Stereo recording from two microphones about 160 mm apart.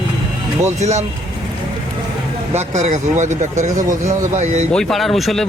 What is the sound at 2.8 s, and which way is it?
Speech, 50° right (ahead or behind).